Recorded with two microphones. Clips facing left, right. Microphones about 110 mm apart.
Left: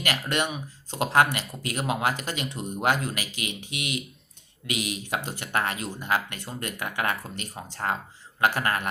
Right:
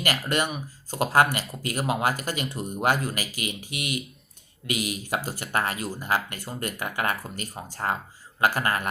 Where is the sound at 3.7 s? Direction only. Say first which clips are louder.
Even; 50° right (ahead or behind).